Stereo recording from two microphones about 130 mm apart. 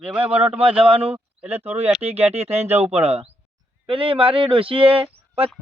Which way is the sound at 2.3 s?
55° right (ahead or behind).